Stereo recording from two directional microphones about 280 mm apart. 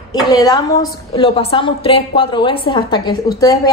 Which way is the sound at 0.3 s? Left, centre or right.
Centre.